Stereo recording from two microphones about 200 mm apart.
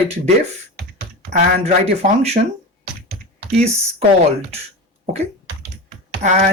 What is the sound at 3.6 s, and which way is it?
Speech, 30° right (ahead or behind).